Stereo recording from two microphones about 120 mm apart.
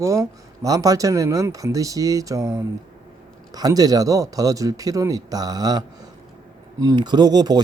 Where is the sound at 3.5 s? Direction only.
30° right (ahead or behind).